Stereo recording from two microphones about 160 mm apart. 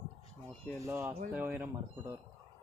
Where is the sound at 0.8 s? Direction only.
15° right (ahead or behind).